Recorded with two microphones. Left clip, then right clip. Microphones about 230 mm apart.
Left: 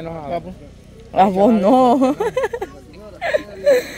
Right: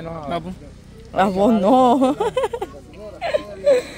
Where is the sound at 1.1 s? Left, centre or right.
Centre.